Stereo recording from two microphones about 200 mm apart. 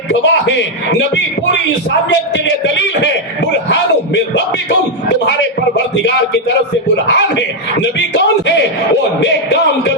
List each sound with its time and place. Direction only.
0.1 s speech: 60° left (ahead or behind)
2.0 s speech: 65° left (ahead or behind)
5.7 s speech: 60° left (ahead or behind)